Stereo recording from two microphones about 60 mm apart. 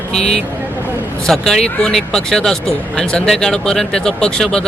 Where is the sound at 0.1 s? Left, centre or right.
Centre.